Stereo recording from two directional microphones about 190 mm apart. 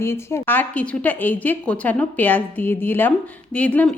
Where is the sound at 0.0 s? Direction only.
15° left (ahead or behind).